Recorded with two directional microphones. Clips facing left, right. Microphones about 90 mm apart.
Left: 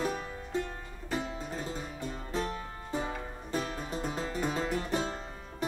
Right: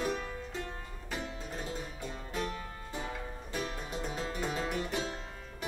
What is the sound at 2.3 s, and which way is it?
Music, 35° left (ahead or behind).